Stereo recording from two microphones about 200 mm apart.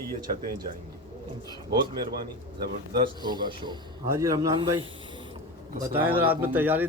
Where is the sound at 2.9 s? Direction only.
20° right (ahead or behind).